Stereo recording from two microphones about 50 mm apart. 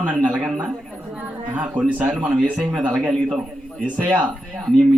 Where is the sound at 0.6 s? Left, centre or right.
Centre.